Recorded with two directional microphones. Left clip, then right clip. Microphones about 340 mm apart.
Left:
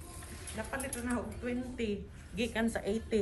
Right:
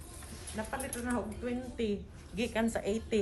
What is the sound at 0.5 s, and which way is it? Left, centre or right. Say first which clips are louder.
Speech: right 1 dB; right.